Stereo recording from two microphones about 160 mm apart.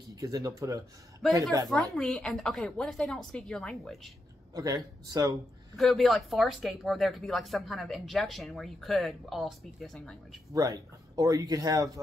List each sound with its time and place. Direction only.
0.1 s speech: 20° right (ahead or behind)
1.7 s speech: 5° left (ahead or behind)
4.6 s speech: 20° right (ahead or behind)
5.8 s speech: centre (ahead or behind)
10.5 s speech: 20° right (ahead or behind)